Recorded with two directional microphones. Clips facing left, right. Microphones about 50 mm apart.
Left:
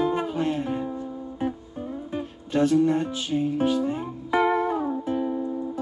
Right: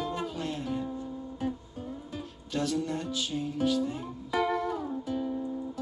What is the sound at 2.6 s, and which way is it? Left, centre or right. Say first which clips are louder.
Music: left 10 dB; left.